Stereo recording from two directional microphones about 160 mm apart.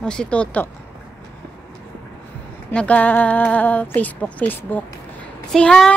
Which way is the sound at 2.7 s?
10° left (ahead or behind).